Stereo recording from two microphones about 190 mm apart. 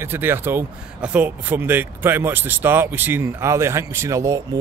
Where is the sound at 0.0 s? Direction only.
10° right (ahead or behind).